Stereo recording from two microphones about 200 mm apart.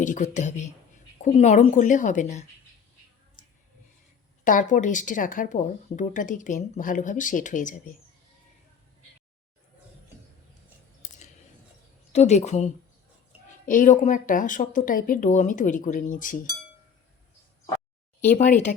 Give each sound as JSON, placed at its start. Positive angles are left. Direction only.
{"t": 0.0, "sound": "speech", "side_deg": 40}
{"t": 4.4, "sound": "speech", "side_deg": 40}
{"t": 11.0, "sound": "a sound", "side_deg": 40}
{"t": 12.1, "sound": "speech", "side_deg": 35}
{"t": 18.3, "sound": "speech", "side_deg": 35}